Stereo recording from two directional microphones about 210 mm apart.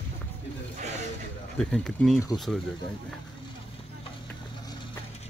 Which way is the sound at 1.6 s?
5° left (ahead or behind).